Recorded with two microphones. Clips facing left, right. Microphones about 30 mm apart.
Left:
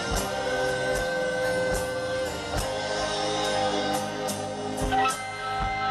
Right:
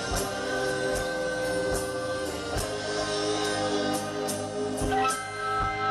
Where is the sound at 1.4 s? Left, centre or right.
Left.